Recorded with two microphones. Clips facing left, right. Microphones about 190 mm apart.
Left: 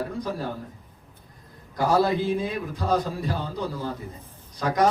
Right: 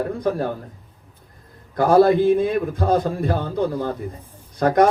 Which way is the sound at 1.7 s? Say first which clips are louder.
Right 8 dB; 55° right (ahead or behind).